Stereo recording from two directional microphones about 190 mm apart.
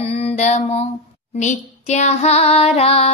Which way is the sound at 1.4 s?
35° left (ahead or behind).